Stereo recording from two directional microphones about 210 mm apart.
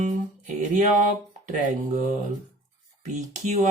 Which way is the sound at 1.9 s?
35° right (ahead or behind).